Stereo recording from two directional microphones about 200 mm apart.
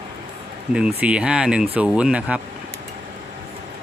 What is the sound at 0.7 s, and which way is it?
Speech, 5° right (ahead or behind).